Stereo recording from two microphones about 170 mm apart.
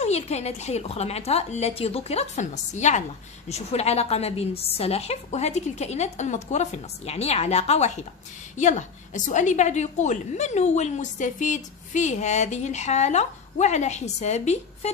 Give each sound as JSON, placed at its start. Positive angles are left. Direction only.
{"t": 0.0, "sound": "a woman's voice", "side_deg": 40}